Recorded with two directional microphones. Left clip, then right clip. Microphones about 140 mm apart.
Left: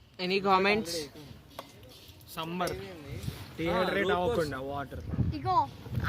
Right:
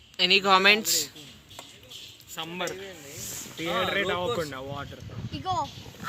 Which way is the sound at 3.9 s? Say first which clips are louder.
Right 1 dB; 45° left (ahead or behind).